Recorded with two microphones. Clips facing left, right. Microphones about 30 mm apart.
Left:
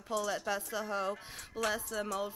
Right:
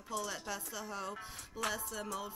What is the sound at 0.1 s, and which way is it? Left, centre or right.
Speech, left.